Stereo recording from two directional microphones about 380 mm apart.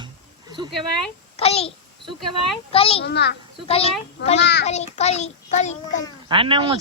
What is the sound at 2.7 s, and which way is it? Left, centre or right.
Speech, centre.